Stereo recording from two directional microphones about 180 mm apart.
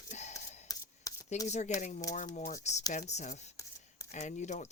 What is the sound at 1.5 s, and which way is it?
Speech, 40° left (ahead or behind).